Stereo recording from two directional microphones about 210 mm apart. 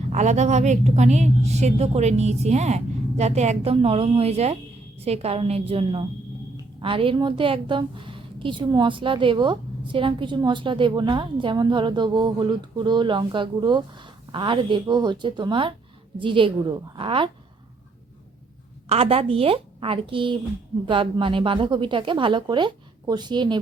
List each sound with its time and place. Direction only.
0.1 s a woman's voice: 35° right (ahead or behind)
18.9 s a woman's voice: 30° right (ahead or behind)